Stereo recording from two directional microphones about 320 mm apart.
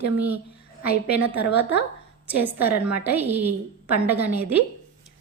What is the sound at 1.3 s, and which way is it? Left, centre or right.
A woman's voice, centre.